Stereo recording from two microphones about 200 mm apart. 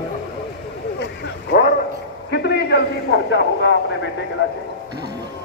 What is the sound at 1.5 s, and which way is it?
A man's voice, 50° left (ahead or behind).